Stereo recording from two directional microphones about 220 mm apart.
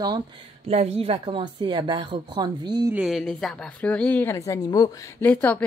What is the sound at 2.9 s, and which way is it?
Speech, centre (ahead or behind).